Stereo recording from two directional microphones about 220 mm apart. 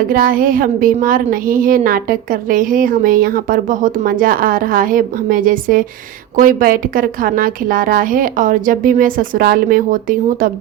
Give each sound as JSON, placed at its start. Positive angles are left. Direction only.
{"t": 0.1, "sound": "a woman's voice", "side_deg": -40}